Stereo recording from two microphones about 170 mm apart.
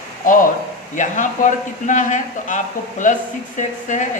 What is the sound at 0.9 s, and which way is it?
Speech, 45° left (ahead or behind).